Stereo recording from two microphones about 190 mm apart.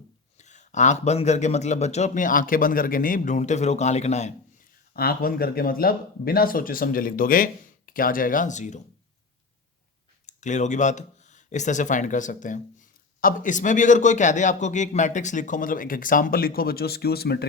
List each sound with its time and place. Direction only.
0.3 s speech: 40° left (ahead or behind)
4.9 s speech: 50° left (ahead or behind)
10.2 s speech: 40° left (ahead or behind); by 17.4 s 55° left (ahead or behind)